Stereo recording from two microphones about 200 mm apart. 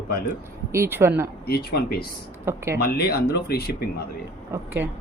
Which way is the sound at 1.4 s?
50° left (ahead or behind).